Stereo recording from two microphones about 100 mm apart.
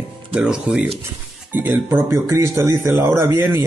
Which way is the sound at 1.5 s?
20° right (ahead or behind).